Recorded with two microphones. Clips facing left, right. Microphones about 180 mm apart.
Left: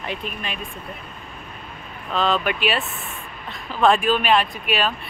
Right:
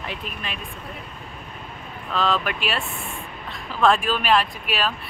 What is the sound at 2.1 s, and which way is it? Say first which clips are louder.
Speech: left 2 dB; centre (ahead or behind).